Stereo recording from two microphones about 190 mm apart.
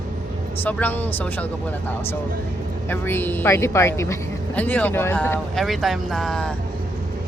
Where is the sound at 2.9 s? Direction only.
10° left (ahead or behind).